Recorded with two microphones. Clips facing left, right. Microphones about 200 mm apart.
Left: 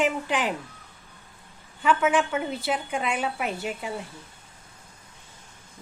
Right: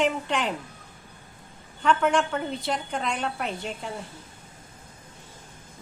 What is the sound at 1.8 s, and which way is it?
A woman's voice, 5° left (ahead or behind).